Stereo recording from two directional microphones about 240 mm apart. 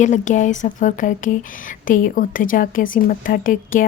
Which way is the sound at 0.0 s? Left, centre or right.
Left.